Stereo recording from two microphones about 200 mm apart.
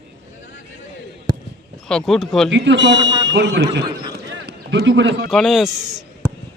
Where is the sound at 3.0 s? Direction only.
20° right (ahead or behind).